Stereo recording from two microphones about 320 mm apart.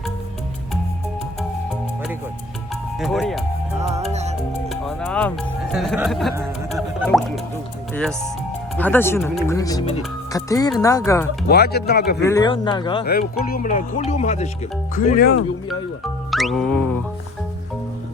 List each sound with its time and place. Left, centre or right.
3.0 s speech: centre
3.8 s music: centre
4.7 s music: centre
7.9 s speech: centre
11.4 s speech: left
12.2 s speech: centre
13.1 s speech: left
16.3 s music: centre